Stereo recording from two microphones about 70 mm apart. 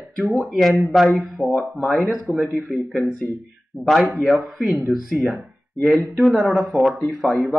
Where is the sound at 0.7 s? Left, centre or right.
Right.